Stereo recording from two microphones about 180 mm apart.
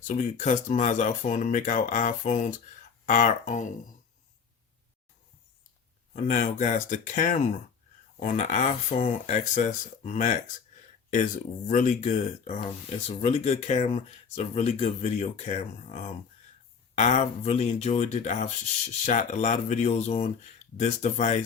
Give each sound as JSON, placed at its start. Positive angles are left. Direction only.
{"t": 0.1, "sound": "speech", "side_deg": 40}
{"t": 6.2, "sound": "speech", "side_deg": 45}
{"t": 11.7, "sound": "speech", "side_deg": 45}